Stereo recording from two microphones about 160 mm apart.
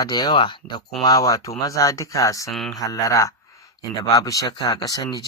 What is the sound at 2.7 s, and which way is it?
Speech, 20° left (ahead or behind).